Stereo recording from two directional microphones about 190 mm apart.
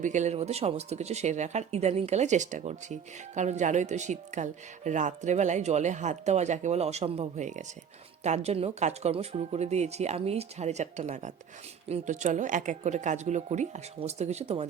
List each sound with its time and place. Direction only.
0.0 s speech: 40° right (ahead or behind)